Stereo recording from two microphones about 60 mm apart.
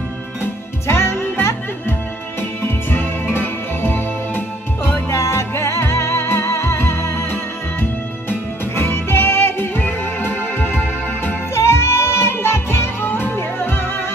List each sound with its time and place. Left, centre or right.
0.4 s music: left
3.3 s music: left
5.1 s music: left
8.3 s music: left
11.5 s music: left